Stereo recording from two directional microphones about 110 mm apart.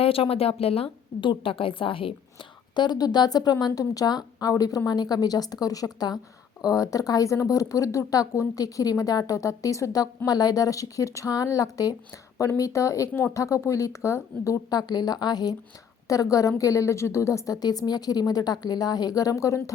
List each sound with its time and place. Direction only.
0.0 s a woman's voice: 60° left (ahead or behind)
2.7 s a woman's voice: 40° left (ahead or behind)